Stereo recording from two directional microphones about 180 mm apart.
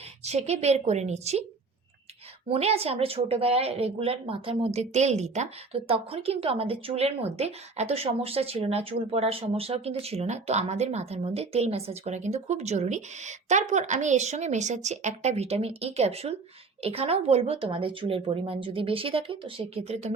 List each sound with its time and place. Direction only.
0.3 s speech: 35° right (ahead or behind)
2.5 s speech: 35° right (ahead or behind)